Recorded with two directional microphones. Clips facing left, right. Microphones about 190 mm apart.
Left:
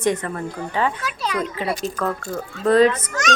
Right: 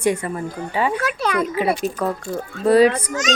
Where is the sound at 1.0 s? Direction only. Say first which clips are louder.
Right 4 dB; 55° right (ahead or behind).